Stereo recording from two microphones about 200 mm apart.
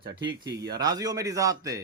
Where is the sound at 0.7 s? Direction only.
20° right (ahead or behind).